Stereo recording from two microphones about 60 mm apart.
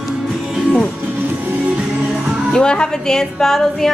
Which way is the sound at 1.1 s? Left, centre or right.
Right.